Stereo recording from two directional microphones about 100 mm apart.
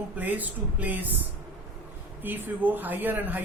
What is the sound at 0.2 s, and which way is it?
Speech, 15° right (ahead or behind).